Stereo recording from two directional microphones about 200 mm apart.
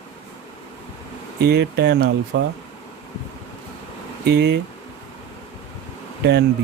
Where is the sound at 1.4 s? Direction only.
55° right (ahead or behind).